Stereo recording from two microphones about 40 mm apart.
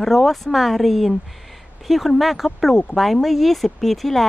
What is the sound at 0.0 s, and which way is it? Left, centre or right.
A woman's voice, centre.